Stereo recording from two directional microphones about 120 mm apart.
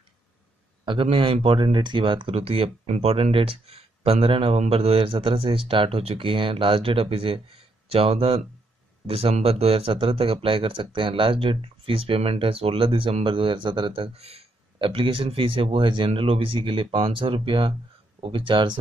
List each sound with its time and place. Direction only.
1.1 s speech: 50° right (ahead or behind)
14.1 s speech: 60° right (ahead or behind)
14.8 s speech: 45° right (ahead or behind)